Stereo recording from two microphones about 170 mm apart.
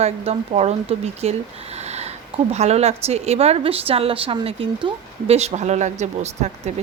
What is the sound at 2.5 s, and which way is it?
A woman's voice, 40° right (ahead or behind).